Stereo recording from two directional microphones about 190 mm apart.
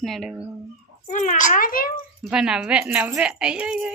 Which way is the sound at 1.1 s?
40° left (ahead or behind).